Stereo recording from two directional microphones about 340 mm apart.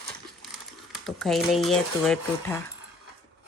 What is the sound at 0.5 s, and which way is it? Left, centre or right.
Speech, centre.